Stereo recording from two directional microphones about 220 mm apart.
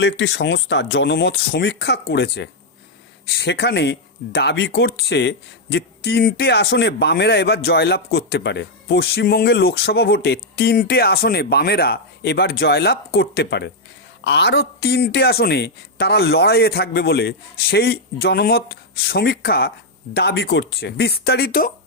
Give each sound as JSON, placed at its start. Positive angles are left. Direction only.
{"t": 0.0, "sound": "speech", "side_deg": 55}